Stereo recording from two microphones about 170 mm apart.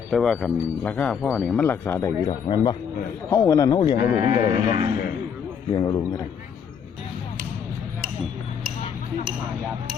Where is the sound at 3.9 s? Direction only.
55° left (ahead or behind).